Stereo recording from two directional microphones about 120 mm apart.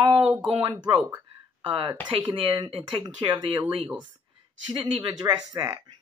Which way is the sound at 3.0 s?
45° right (ahead or behind).